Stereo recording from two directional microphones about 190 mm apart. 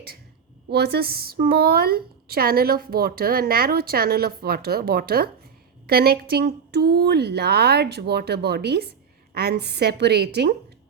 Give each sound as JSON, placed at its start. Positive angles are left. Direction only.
{"t": 0.7, "sound": "a woman's voice", "side_deg": -60}